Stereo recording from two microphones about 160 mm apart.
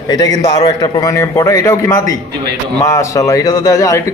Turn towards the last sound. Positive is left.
turn(degrees=20)  # may be behind; listen again after turning